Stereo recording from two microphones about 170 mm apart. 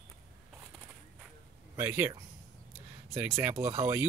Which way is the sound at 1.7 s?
15° right (ahead or behind).